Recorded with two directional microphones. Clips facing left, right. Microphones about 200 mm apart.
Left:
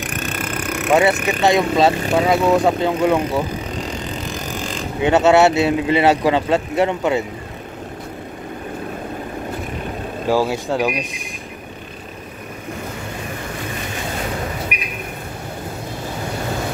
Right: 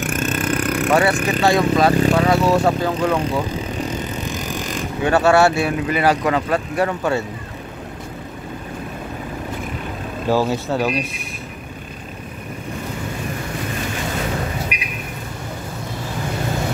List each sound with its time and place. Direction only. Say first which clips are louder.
0.4 s a sound: right 4 dB; 10° left (ahead or behind)
0.9 s speech: left 3 dB; 20° left (ahead or behind)
5.0 s speech: left 2 dB; 20° left (ahead or behind)
10.2 s speech: even; 10° left (ahead or behind)